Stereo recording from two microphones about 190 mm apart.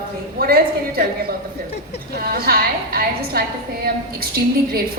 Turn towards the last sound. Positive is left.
turn(degrees=-55)  # may be behind; listen again after turning